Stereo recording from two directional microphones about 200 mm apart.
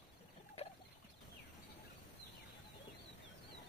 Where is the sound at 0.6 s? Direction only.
30° left (ahead or behind).